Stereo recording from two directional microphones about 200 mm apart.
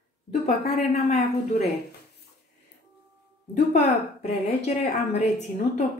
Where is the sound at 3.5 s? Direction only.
35° left (ahead or behind).